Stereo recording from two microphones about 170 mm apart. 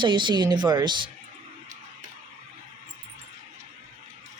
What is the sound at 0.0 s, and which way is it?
Speech, 25° right (ahead or behind).